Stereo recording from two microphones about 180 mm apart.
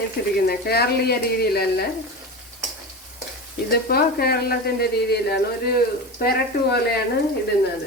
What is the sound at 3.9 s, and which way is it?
Speech, 55° left (ahead or behind).